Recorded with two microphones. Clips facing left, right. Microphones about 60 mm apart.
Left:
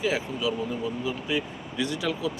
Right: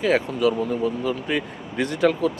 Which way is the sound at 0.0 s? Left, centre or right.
Right.